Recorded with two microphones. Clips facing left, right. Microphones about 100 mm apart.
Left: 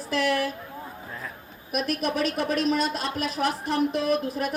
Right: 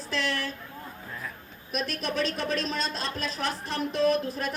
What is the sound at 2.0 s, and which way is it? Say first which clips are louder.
A woman's voice: left 2 dB; 30° right (ahead or behind).